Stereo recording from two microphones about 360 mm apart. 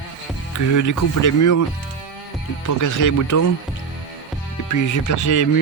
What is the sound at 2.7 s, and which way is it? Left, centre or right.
Speech, left.